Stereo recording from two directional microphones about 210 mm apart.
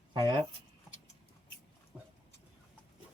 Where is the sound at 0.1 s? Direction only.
20° right (ahead or behind).